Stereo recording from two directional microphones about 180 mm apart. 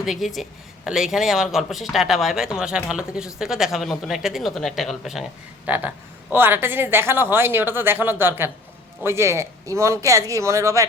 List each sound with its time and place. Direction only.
0.0 s a woman's voice: centre (ahead or behind); by 10.8 s 15° right (ahead or behind)